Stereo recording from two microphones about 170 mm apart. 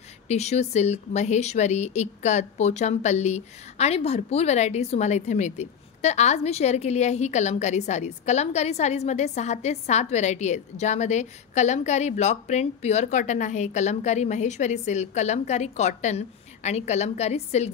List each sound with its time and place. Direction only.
0.3 s speech: 40° left (ahead or behind)